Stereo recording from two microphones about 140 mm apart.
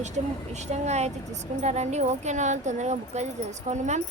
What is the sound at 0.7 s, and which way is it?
Speech, 50° right (ahead or behind).